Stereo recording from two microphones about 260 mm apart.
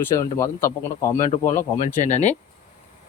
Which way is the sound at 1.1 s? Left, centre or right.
Left.